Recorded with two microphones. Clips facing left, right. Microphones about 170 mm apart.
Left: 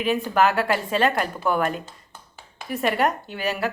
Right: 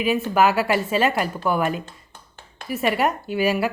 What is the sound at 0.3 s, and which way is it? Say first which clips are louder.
Speech: right 2 dB; 5° right (ahead or behind).